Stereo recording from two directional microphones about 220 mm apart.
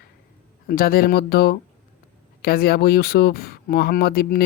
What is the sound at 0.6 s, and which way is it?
Speech, 40° left (ahead or behind).